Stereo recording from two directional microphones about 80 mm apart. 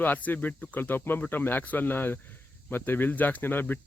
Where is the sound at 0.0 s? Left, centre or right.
Left.